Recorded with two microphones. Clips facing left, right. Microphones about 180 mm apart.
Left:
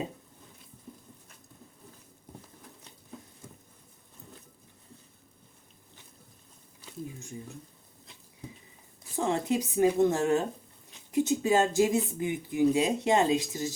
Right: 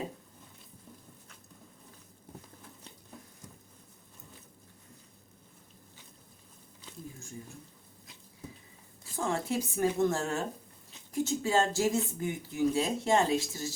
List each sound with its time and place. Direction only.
9.1 s speech: 20° left (ahead or behind)